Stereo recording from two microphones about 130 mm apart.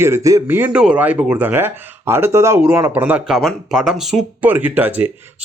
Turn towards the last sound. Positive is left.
turn(degrees=-15)  # may be behind; listen again after turning